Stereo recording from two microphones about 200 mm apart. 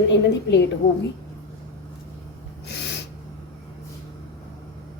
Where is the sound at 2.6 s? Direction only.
55° left (ahead or behind).